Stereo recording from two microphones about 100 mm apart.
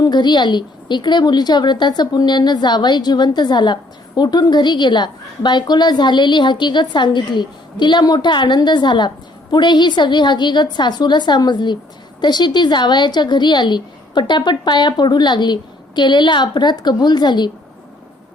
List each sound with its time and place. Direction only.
0.0 s a woman's voice: 45° left (ahead or behind)